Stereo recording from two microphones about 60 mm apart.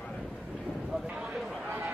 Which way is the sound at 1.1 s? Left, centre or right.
Centre.